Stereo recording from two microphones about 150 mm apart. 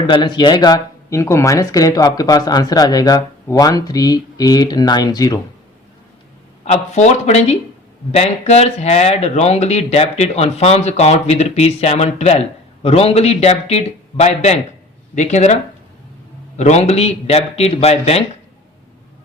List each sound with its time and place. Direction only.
0.1 s speech: 30° left (ahead or behind)
6.7 s speech: 50° left (ahead or behind)
16.6 s speech: 50° left (ahead or behind)